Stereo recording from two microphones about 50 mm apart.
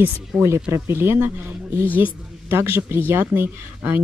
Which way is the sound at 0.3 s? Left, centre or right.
Right.